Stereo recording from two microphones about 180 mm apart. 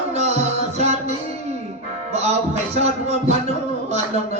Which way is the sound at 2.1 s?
35° right (ahead or behind).